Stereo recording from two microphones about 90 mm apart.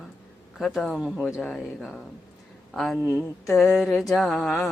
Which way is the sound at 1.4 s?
10° left (ahead or behind).